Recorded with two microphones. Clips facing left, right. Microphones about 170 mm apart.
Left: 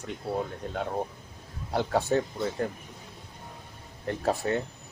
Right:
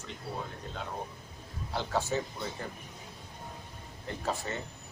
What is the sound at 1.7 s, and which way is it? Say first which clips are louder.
Speech: left 6 dB; 55° left (ahead or behind).